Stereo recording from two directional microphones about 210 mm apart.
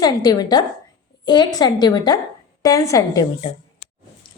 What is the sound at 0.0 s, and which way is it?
A woman's voice, 20° left (ahead or behind).